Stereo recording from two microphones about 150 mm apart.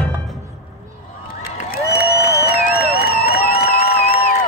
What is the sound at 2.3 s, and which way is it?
Music, 90° left.